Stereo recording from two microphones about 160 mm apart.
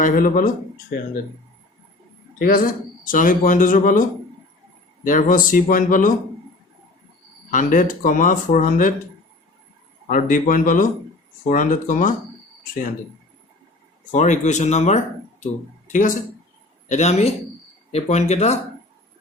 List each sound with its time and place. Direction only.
0.0 s speech: 55° left (ahead or behind)
2.4 s speech: 65° left (ahead or behind)
5.0 s speech: 60° left (ahead or behind)
7.5 s speech: 55° left (ahead or behind)
10.1 s speech: 55° left (ahead or behind)
14.1 s speech: 45° left (ahead or behind)